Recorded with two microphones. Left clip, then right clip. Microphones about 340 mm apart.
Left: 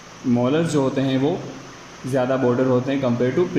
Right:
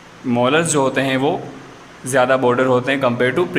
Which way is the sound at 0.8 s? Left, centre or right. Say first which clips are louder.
Right 4 dB; right.